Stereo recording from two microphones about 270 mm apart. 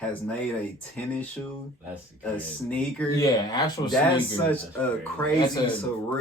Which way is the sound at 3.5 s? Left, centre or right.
Centre.